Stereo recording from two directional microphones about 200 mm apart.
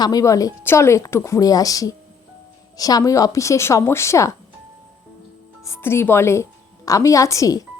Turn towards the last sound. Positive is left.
turn(degrees=15)  # may be behind; listen again after turning